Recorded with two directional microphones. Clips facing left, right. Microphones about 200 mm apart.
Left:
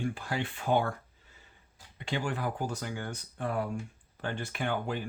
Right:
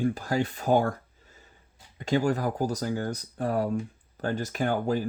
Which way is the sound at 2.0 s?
40° right (ahead or behind).